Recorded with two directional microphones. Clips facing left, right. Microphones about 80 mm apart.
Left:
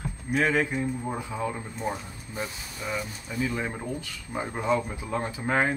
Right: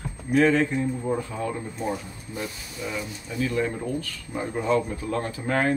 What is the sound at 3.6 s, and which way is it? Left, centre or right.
Speech, centre.